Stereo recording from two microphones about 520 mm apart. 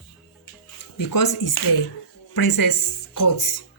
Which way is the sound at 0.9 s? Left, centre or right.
Left.